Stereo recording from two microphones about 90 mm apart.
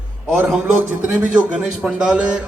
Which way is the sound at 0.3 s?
10° right (ahead or behind).